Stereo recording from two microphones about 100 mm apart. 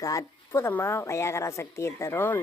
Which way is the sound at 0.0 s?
30° left (ahead or behind).